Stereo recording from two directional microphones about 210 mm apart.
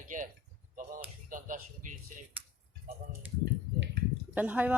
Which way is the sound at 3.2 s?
10° right (ahead or behind).